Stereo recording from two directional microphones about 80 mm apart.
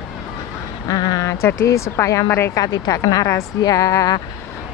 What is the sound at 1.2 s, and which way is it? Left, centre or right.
Speech, left.